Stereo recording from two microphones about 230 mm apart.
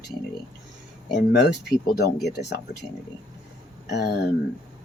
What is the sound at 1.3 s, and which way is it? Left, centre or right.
Speech, left.